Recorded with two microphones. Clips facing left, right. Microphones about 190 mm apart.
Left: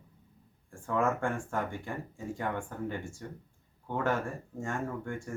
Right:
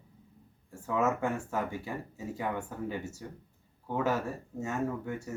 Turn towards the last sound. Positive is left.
turn(degrees=-5)  # may be behind; listen again after turning